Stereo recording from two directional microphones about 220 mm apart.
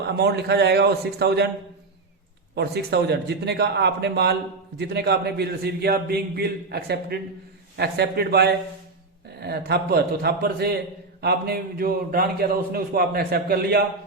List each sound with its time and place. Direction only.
0.2 s a man's voice: 50° right (ahead or behind)
2.6 s a man's voice: 50° right (ahead or behind)